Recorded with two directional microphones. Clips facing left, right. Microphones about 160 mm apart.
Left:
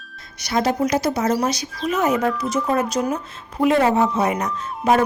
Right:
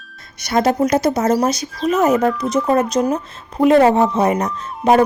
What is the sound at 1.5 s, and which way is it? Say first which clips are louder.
Speech: right 5 dB; centre (ahead or behind).